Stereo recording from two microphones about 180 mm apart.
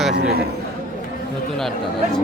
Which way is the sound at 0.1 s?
70° right (ahead or behind).